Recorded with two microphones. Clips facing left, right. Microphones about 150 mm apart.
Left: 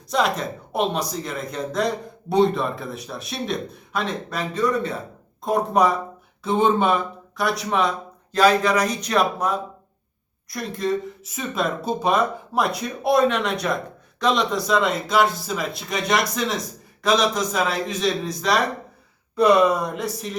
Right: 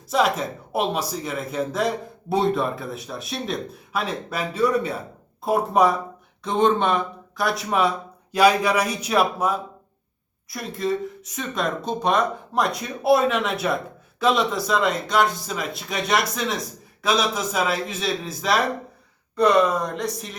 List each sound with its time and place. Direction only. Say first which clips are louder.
0.1 s speech: right 1 dB; 5° right (ahead or behind)
19.4 s speech: left 2 dB; 10° left (ahead or behind)